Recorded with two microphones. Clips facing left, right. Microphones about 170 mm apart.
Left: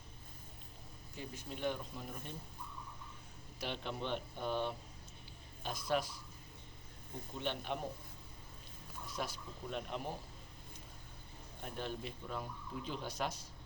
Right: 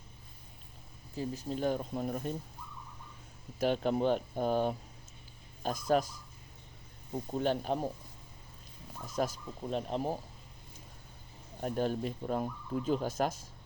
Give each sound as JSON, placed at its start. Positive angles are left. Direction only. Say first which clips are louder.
{"t": 1.1, "sound": "speech", "louder": "right 10 dB", "side_deg": -35}
{"t": 2.6, "sound": "a sound", "louder": "right 1 dB", "side_deg": 55}
{"t": 3.6, "sound": "speech", "louder": "right 12 dB", "side_deg": -45}
{"t": 7.3, "sound": "speech", "louder": "right 9 dB", "side_deg": -40}
{"t": 9.0, "sound": "speech", "louder": "right 9 dB", "side_deg": -45}
{"t": 11.6, "sound": "speech", "louder": "right 11 dB", "side_deg": -45}